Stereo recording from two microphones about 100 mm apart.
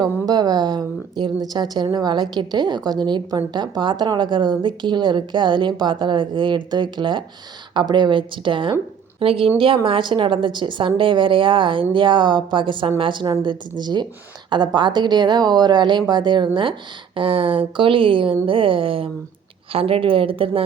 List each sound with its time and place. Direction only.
0.0 s a woman's voice: 40° right (ahead or behind)
17.2 s a woman's voice: 65° right (ahead or behind)